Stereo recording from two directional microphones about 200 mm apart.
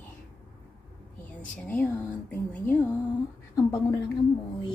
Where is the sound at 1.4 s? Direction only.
10° left (ahead or behind).